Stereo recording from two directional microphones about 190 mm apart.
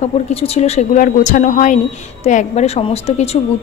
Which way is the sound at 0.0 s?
30° left (ahead or behind).